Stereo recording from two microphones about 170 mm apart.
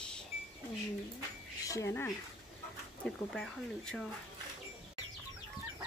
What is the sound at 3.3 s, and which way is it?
Speech, centre (ahead or behind).